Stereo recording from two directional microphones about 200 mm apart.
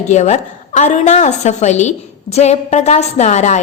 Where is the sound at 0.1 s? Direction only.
35° left (ahead or behind).